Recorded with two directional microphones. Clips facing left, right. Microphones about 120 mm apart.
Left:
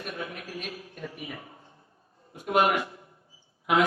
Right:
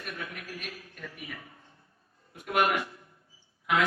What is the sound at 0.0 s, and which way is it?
A man's voice, 20° left (ahead or behind).